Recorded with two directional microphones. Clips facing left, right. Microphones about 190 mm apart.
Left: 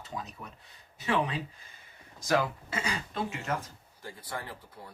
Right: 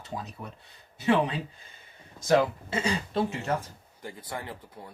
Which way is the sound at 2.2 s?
25° right (ahead or behind).